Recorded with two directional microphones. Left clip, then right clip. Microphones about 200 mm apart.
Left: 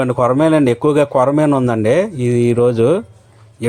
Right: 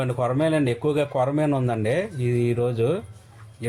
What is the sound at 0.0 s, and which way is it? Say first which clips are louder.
A man's voice: left 10 dB; 35° left (ahead or behind).